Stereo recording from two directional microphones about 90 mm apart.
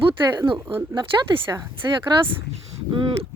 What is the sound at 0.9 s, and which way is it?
Speech, 80° right.